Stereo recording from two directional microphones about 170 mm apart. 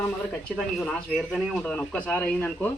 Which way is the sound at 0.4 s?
5° left (ahead or behind).